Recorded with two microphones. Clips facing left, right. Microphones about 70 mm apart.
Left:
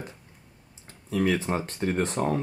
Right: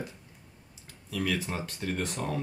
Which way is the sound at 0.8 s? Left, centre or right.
Left.